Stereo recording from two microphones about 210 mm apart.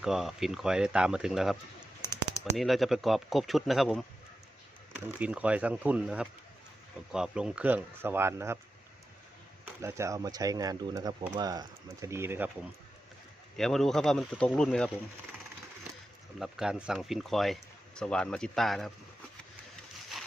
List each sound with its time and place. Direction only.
0.0 s speech: centre (ahead or behind)
5.0 s speech: 5° right (ahead or behind)
9.8 s speech: 15° right (ahead or behind)
13.6 s speech: centre (ahead or behind)
16.4 s speech: 5° right (ahead or behind)
20.1 s a sound: centre (ahead or behind)